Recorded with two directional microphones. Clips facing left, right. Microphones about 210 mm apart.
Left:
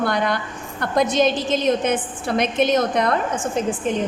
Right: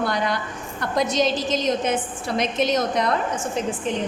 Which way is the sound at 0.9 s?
55° left (ahead or behind).